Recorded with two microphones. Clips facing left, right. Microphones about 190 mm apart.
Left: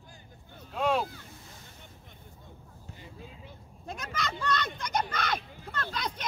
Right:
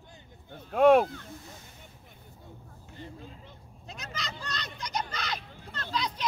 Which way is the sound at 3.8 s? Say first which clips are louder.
Left 5 dB; 50° left (ahead or behind).